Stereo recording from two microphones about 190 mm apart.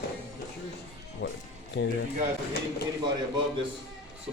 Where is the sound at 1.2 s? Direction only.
75° left (ahead or behind).